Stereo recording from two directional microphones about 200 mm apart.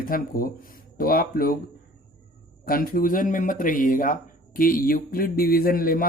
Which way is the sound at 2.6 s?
45° left (ahead or behind).